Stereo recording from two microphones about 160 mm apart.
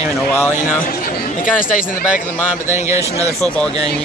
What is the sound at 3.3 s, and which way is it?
Speech, 10° left (ahead or behind).